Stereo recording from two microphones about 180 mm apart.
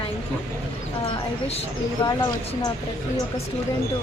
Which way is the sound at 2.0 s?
25° left (ahead or behind).